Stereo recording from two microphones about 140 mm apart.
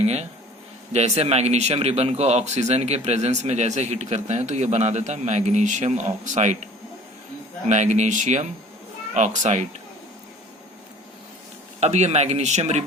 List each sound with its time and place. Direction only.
0.0 s speech: 50° right (ahead or behind)
7.7 s speech: 55° right (ahead or behind)
11.8 s speech: 55° right (ahead or behind)